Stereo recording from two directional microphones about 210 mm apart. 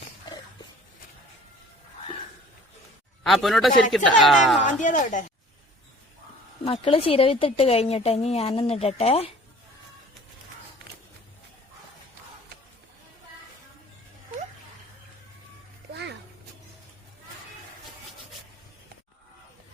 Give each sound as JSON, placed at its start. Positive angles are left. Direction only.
{"t": 3.2, "sound": "a woman's voice", "side_deg": 0}
{"t": 4.6, "sound": "speech", "side_deg": 35}
{"t": 6.7, "sound": "a woman's voice", "side_deg": 25}
{"t": 15.9, "sound": "a sound", "side_deg": -55}